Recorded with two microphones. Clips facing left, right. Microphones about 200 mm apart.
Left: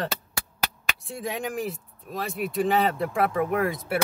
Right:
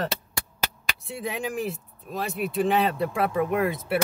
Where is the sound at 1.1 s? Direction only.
Centre (ahead or behind).